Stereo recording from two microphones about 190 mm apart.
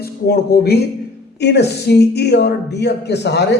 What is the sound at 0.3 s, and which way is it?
A man's voice, 55° left (ahead or behind).